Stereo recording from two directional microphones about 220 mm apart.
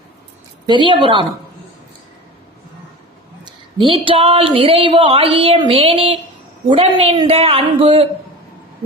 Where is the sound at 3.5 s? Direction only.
20° right (ahead or behind).